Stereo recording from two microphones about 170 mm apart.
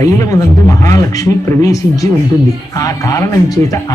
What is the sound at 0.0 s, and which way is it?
Speech, 20° left (ahead or behind).